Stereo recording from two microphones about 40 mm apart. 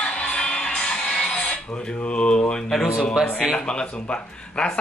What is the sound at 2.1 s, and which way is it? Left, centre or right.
Mantra, left.